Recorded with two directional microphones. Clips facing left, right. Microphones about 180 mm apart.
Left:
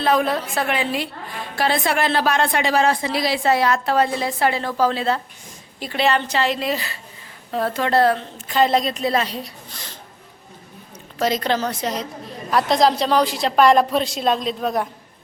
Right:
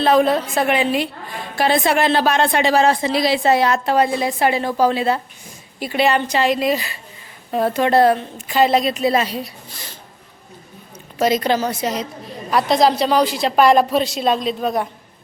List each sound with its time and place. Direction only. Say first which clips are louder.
0.0 s a woman's voice: right 4 dB; 25° right (ahead or behind); by 9.8 s 5° right (ahead or behind)
11.2 s a woman's voice: right 3 dB; 10° right (ahead or behind)